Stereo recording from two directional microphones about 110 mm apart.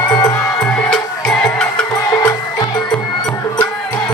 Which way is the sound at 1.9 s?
35° left (ahead or behind).